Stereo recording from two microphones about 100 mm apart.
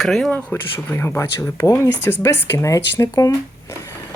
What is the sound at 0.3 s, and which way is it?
Speech, 20° left (ahead or behind).